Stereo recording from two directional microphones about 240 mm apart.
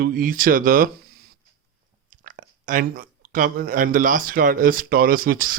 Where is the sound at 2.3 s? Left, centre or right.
Right.